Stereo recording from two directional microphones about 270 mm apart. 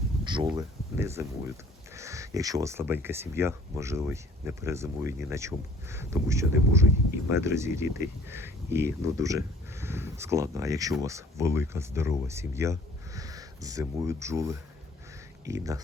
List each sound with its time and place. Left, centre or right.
0.3 s speech: centre